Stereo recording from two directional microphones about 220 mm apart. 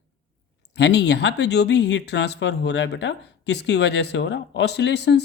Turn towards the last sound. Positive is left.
turn(degrees=50)  # may be behind; listen again after turning